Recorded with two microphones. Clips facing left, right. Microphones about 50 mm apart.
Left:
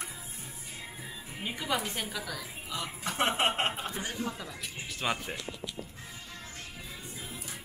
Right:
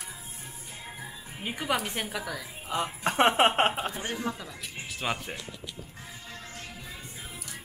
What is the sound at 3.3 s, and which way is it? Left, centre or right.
Speech, right.